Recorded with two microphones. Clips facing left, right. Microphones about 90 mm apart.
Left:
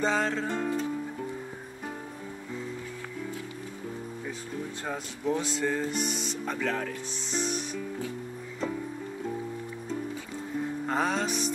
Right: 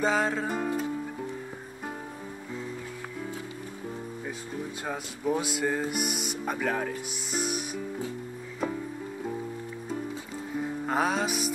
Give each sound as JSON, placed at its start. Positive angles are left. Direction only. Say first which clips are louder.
{"t": 0.0, "sound": "music", "louder": "right 1 dB", "side_deg": -10}
{"t": 4.8, "sound": "speech", "louder": "right 1 dB", "side_deg": -10}
{"t": 10.9, "sound": "speech", "louder": "right 2 dB", "side_deg": -10}